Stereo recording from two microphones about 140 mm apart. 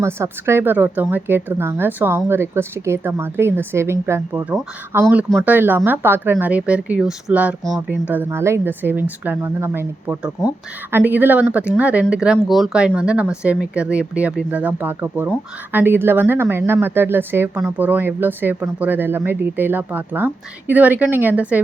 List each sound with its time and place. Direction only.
0.0 s speech: 15° right (ahead or behind)